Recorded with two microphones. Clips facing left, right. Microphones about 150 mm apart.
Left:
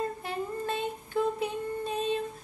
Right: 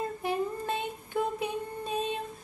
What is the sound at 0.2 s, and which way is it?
Humming, 20° right (ahead or behind).